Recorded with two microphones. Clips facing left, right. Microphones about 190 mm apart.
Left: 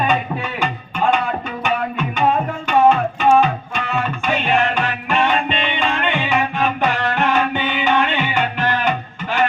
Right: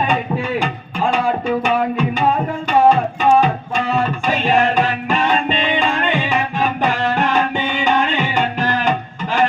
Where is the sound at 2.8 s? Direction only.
35° right (ahead or behind).